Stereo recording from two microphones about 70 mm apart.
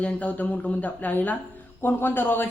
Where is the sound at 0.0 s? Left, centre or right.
Left.